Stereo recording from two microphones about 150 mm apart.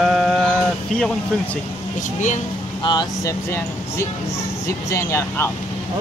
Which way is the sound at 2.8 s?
30° left (ahead or behind).